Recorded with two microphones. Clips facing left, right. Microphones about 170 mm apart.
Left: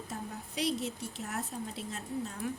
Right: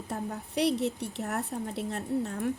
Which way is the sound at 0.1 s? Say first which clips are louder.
Right 9 dB; 65° right (ahead or behind).